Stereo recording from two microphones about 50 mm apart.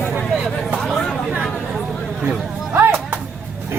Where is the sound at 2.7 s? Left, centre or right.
Right.